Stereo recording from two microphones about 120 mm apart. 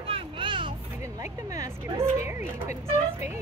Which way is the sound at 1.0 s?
25° right (ahead or behind).